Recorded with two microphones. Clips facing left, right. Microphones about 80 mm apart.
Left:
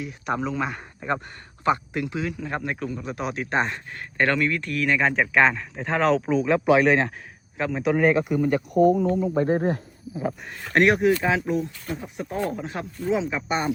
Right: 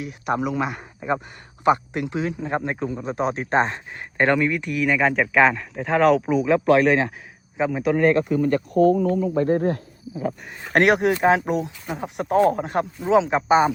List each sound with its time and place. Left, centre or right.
0.3 s speech: centre
1.6 s speech: right
3.9 s speech: centre
7.5 s a man's voice: centre
7.8 s speech: centre; by 9.6 s left
10.5 s speech: centre
10.8 s speech: right
12.5 s speech: right
13.1 s speech: right